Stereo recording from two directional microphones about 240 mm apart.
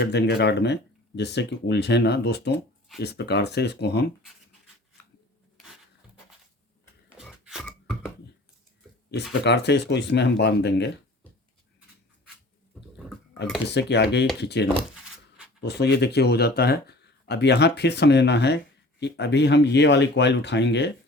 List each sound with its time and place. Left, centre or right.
0.0 s speech: left
7.2 s a sound: centre
9.0 s speech: left
13.7 s speech: left